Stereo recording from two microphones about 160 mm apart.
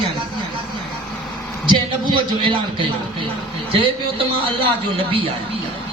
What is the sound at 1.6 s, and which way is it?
Speech, 30° right (ahead or behind).